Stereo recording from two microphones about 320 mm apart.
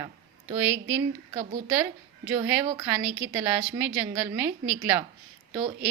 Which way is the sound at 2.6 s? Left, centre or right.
Centre.